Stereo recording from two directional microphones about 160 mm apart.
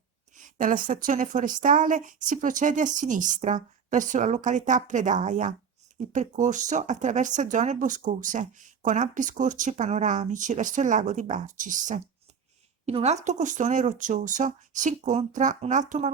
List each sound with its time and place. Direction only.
0.3 s speech: 55° right (ahead or behind)
12.8 s speech: 40° right (ahead or behind)